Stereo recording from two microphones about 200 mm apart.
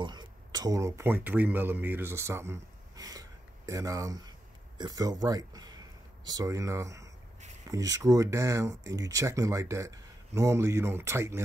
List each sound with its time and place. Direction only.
0.0 s speech: 20° right (ahead or behind)